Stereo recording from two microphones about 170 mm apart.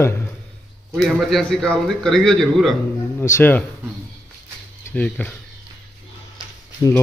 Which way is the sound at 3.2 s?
15° left (ahead or behind).